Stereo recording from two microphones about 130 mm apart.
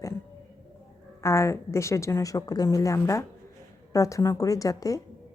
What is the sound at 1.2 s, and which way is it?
A woman's voice, 20° left (ahead or behind).